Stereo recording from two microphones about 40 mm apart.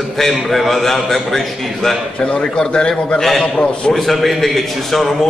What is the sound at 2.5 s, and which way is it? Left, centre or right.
Speech, left.